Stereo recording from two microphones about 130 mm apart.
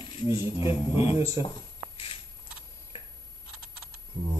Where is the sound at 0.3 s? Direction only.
45° left (ahead or behind).